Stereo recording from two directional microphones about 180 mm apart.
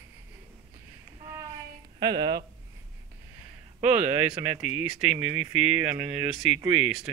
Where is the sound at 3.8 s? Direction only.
40° right (ahead or behind).